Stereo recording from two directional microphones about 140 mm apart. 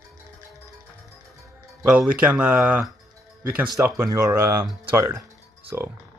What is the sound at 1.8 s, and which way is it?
Speech, 10° right (ahead or behind).